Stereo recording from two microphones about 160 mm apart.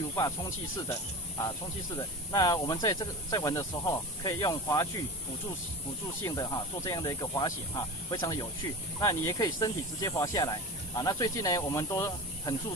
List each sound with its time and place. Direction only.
0.1 s speech: 20° left (ahead or behind)
2.0 s speech: 25° left (ahead or behind)
6.2 s speech: 25° left (ahead or behind)